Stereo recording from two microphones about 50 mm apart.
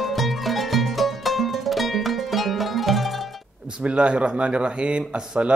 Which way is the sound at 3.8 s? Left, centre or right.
Right.